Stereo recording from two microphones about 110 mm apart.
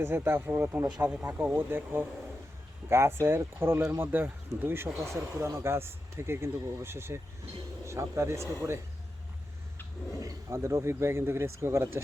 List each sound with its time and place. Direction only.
0.0 s speech: 20° right (ahead or behind)
10.2 s speech: 25° right (ahead or behind)